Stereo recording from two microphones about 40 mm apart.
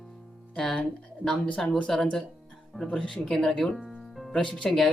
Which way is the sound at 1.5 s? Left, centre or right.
Centre.